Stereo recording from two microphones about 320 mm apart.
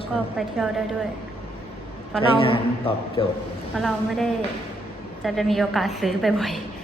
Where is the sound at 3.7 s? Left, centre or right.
Centre.